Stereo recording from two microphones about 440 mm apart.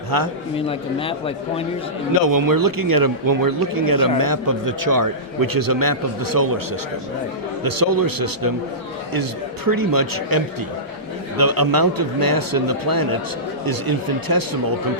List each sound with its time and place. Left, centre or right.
0.5 s speech: centre
2.2 s a man's voice: right
7.6 s a man's voice: right
9.6 s a man's voice: right